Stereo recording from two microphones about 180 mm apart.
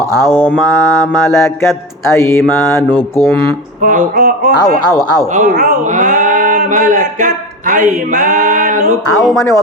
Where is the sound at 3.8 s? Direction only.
50° right (ahead or behind).